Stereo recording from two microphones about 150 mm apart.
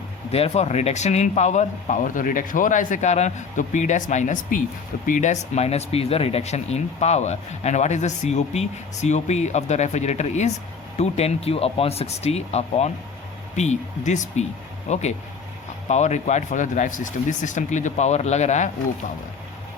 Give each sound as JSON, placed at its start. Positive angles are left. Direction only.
{"t": 0.3, "sound": "speech", "side_deg": 45}